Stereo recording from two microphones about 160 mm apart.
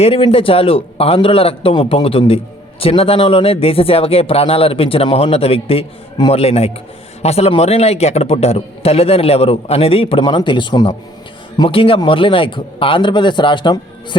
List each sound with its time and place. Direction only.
0.0 s speech: 40° left (ahead or behind)